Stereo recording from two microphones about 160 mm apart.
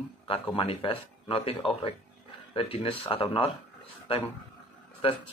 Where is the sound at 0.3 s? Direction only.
35° left (ahead or behind).